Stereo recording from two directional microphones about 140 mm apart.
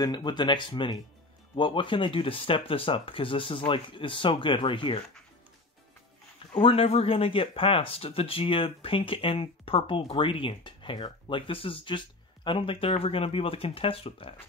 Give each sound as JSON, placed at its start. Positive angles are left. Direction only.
{"t": 0.0, "sound": "speech", "side_deg": 30}
{"t": 6.5, "sound": "speech", "side_deg": 40}